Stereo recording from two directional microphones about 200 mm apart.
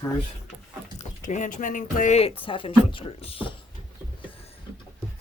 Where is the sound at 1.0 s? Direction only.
40° left (ahead or behind).